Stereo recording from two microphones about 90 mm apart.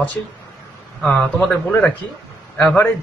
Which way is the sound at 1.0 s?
15° left (ahead or behind).